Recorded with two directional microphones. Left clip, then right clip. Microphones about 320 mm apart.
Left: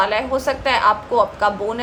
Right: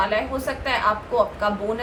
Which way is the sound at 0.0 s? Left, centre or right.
Left.